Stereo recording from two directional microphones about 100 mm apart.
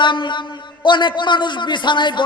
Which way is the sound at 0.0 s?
50° left (ahead or behind).